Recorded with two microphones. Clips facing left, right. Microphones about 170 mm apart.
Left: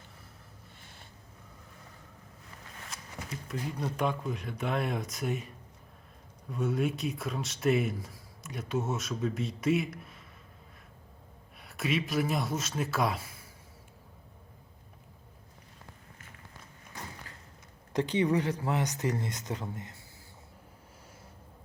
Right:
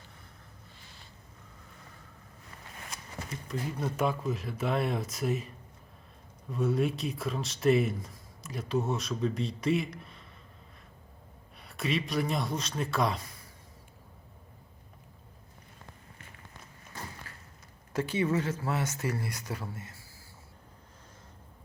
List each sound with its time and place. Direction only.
3.5 s speech: 5° right (ahead or behind)
6.5 s speech: centre (ahead or behind)
11.5 s speech: centre (ahead or behind)
17.3 s a sound: 20° left (ahead or behind)
17.9 s speech: 20° left (ahead or behind)